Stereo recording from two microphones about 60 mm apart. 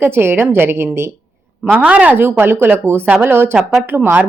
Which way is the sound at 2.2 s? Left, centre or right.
Right.